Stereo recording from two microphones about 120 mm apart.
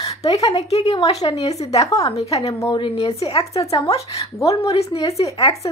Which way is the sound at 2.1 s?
60° left (ahead or behind).